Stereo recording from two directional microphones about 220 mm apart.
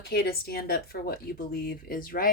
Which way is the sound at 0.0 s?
45° left (ahead or behind).